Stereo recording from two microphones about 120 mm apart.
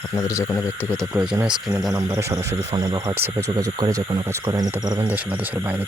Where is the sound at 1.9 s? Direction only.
30° right (ahead or behind).